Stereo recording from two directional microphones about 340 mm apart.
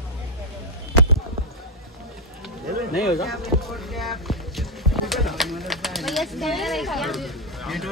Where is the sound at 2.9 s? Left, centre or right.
Centre.